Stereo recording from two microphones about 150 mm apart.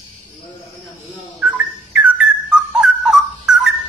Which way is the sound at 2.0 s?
5° right (ahead or behind).